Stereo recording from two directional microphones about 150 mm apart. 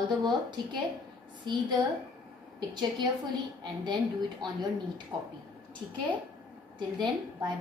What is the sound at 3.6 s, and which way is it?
Speech, 30° right (ahead or behind).